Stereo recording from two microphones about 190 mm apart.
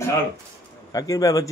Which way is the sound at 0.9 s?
20° left (ahead or behind).